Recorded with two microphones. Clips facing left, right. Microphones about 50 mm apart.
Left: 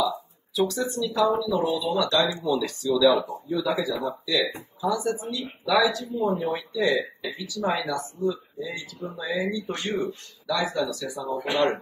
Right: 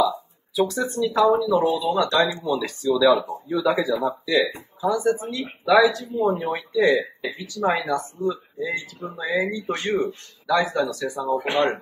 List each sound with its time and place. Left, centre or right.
0.6 s speech: right
1.2 s speech: centre
1.8 s speech: right
3.3 s speech: right